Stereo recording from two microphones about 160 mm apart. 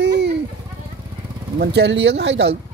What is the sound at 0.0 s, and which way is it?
Goat, 90° right.